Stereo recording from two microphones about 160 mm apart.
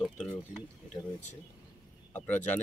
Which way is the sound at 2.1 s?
10° left (ahead or behind).